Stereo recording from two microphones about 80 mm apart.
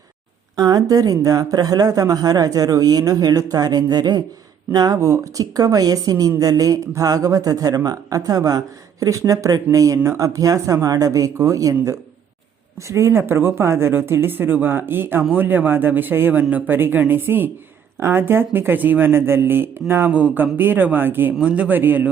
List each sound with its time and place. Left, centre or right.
0.5 s speech: right
20.1 s speech: centre